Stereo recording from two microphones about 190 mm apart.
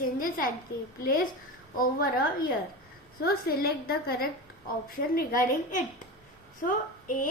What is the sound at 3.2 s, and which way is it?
A woman's voice, 55° left (ahead or behind).